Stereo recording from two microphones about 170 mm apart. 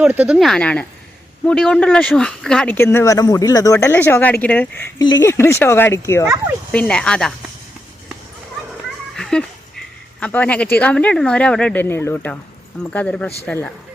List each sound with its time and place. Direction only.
0.0 s speech: 10° right (ahead or behind); by 4.9 s 10° left (ahead or behind)
4.9 s speech: 20° left (ahead or behind); by 7.3 s 5° left (ahead or behind)
9.1 s speech: 5° left (ahead or behind)